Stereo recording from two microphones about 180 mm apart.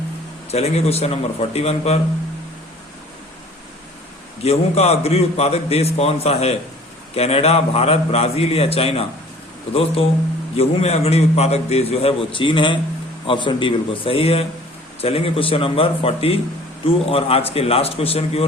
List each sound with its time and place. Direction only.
0.5 s a man's voice: 35° left (ahead or behind)
4.4 s a man's voice: 35° left (ahead or behind)
10.6 s a man's voice: 35° left (ahead or behind)